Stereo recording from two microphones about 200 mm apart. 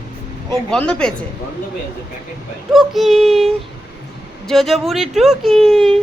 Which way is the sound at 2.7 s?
Centre (ahead or behind).